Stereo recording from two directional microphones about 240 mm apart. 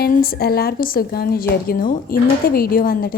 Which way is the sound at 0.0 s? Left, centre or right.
Left.